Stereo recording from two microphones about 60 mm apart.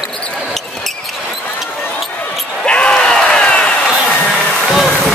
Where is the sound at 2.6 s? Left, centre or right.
Centre.